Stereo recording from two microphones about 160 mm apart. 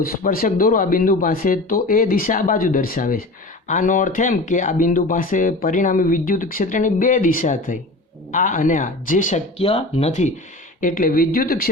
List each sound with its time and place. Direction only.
0.0 s speech: 60° left (ahead or behind)
9.6 s speech: 35° left (ahead or behind); by 11.7 s 65° left (ahead or behind)